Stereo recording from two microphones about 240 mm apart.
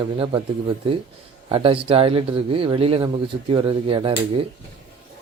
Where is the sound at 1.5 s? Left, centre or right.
Right.